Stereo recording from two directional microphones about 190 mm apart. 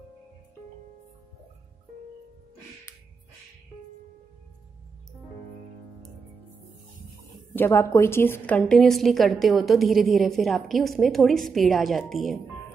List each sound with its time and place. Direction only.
7.5 s a woman's voice: 10° left (ahead or behind)